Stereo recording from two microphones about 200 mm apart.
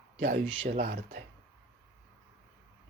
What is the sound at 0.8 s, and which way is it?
Speech, 50° right (ahead or behind).